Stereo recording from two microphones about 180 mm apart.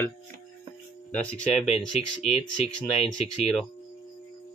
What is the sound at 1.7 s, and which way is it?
Speech, 35° left (ahead or behind).